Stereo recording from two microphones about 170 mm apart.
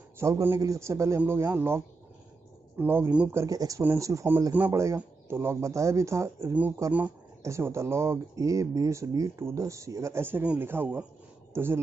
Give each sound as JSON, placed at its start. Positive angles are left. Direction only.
{"t": 0.2, "sound": "speech", "side_deg": -15}